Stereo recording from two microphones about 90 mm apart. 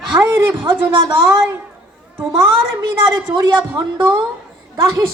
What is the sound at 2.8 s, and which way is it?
Speech, 40° right (ahead or behind).